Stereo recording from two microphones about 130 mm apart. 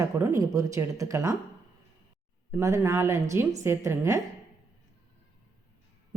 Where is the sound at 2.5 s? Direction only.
20° right (ahead or behind).